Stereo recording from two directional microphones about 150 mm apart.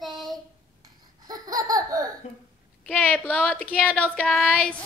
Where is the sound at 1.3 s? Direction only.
25° right (ahead or behind).